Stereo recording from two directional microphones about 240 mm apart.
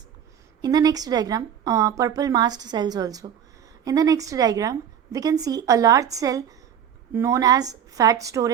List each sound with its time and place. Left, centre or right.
0.6 s a woman's voice: centre